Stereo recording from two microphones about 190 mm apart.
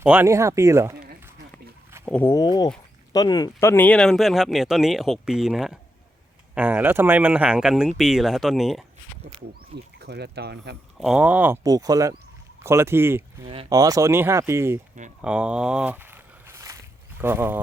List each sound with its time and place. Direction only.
0.0 s speech: 10° right (ahead or behind)
2.0 s speech: 5° left (ahead or behind)
2.3 s speech: 20° left (ahead or behind); by 8.8 s centre (ahead or behind)
10.0 s speech: 60° right (ahead or behind)
10.9 s speech: 5° right (ahead or behind)
13.4 s speech: 25° right (ahead or behind)
15.2 s walk: 5° right (ahead or behind)
17.2 s speech: 10° right (ahead or behind)